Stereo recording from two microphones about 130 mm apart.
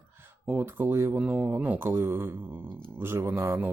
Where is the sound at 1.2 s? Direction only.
10° right (ahead or behind).